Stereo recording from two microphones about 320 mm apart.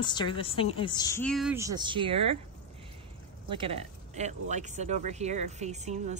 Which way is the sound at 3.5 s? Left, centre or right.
Centre.